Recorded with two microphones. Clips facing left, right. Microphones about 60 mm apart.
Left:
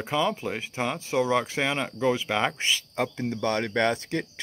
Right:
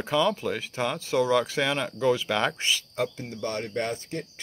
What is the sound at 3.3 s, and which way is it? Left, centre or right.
Speech, left.